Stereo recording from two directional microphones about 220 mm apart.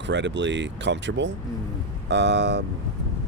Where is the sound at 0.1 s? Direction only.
55° right (ahead or behind).